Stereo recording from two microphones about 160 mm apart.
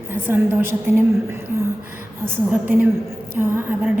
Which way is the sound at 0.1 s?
15° right (ahead or behind).